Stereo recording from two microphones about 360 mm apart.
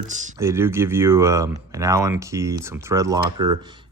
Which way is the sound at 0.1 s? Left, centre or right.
Centre.